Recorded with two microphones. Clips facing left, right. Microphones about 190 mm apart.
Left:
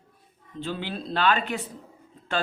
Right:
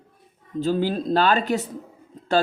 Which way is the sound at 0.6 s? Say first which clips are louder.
Right 10 dB; 40° right (ahead or behind).